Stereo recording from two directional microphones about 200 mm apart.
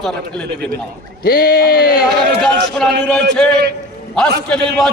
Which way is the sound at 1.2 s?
50° left (ahead or behind).